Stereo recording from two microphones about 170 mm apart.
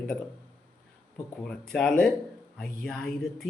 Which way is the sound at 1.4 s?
5° left (ahead or behind).